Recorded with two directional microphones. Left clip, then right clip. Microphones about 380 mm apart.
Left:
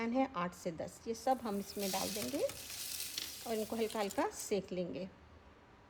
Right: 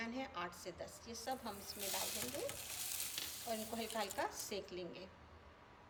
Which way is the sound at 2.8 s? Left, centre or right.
Centre.